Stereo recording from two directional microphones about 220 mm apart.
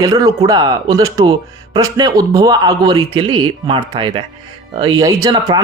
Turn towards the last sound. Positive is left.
turn(degrees=-20)  # may be behind; listen again after turning